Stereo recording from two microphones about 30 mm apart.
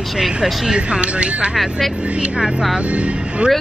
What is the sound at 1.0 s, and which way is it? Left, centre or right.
Speech, right.